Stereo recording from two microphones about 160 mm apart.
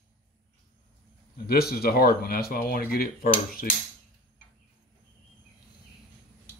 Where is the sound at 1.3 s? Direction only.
70° left (ahead or behind).